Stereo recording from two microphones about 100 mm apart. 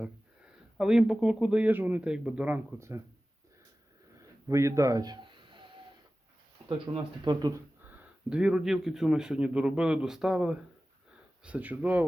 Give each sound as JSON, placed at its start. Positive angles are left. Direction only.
{"t": 0.8, "sound": "a man's voice", "side_deg": -5}
{"t": 2.7, "sound": "speech", "side_deg": -30}
{"t": 4.2, "sound": "a sound", "side_deg": -30}
{"t": 6.7, "sound": "speech", "side_deg": -60}
{"t": 7.5, "sound": "a sound", "side_deg": -20}
{"t": 8.4, "sound": "a man's voice", "side_deg": -5}